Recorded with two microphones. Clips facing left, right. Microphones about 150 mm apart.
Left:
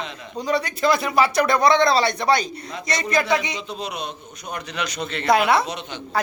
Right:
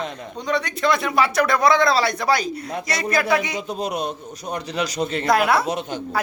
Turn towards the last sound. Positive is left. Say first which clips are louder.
# right 6 dB
turn(degrees=-45)  # may be behind; listen again after turning